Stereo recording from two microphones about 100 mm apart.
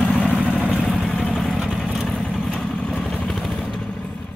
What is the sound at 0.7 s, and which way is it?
Vehicle, centre (ahead or behind).